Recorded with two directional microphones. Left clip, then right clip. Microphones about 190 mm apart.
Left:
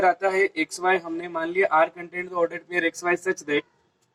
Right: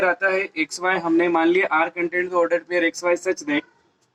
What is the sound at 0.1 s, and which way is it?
A man's voice, 15° right (ahead or behind).